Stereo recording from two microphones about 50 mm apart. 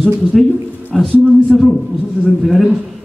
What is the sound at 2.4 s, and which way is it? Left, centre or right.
Speech, centre.